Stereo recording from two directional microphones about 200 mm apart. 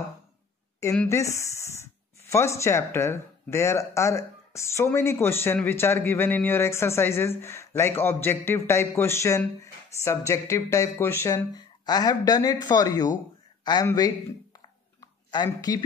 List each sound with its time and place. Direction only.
0.9 s speech: 15° left (ahead or behind)
15.3 s speech: 20° left (ahead or behind)